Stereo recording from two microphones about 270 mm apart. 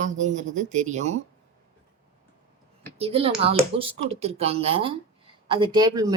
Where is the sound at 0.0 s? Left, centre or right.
Right.